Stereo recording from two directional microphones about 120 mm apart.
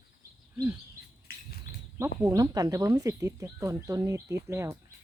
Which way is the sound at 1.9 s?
25° right (ahead or behind).